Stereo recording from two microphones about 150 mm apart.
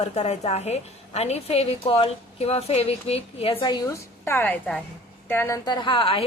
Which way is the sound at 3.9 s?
15° left (ahead or behind).